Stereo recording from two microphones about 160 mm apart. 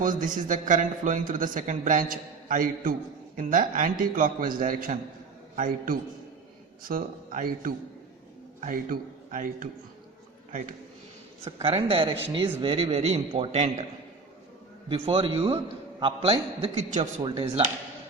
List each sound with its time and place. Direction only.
0.0 s a man's voice: 55° right (ahead or behind)
11.4 s a man's voice: 35° right (ahead or behind)
14.8 s a man's voice: 35° right (ahead or behind)